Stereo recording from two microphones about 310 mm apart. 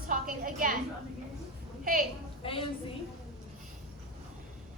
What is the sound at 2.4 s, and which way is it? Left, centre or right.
Speech, centre.